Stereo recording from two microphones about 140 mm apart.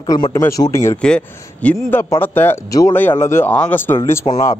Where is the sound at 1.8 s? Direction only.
20° left (ahead or behind).